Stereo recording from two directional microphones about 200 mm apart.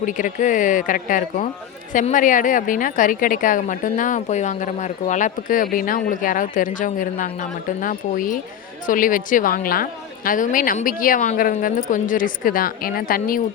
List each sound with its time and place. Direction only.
0.0 s a woman's voice: 40° left (ahead or behind)